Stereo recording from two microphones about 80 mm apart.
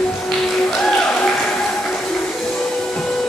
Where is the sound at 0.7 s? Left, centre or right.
Centre.